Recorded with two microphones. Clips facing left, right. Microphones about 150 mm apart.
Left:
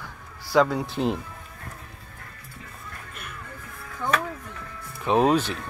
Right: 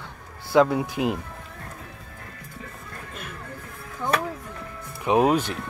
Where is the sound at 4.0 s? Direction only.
15° right (ahead or behind).